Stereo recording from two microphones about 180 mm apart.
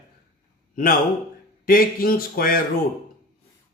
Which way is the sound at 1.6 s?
55° left (ahead or behind).